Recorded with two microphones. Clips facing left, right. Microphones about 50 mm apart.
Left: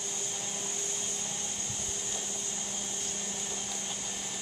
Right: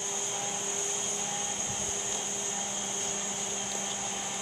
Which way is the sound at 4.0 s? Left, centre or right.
Right.